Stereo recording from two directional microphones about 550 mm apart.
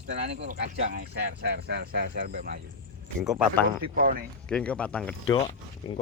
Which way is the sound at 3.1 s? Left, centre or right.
Centre.